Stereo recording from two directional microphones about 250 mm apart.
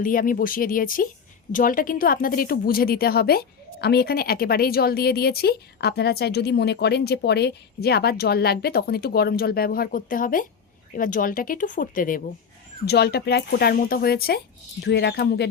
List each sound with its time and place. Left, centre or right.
0.0 s a woman's voice: left